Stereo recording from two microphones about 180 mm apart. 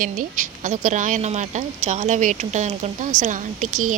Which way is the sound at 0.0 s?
50° right (ahead or behind).